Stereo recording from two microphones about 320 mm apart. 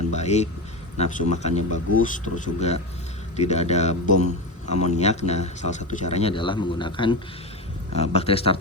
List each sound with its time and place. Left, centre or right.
0.1 s speech: left